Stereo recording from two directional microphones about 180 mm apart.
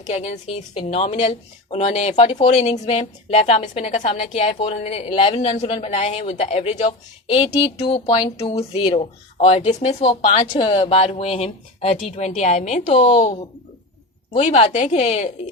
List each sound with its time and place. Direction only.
0.0 s speech: 40° left (ahead or behind)
14.3 s speech: 40° left (ahead or behind)